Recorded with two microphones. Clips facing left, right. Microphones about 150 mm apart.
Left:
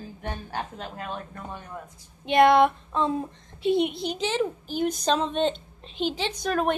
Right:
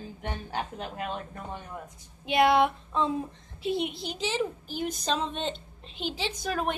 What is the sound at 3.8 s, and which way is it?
Speech, 60° left (ahead or behind).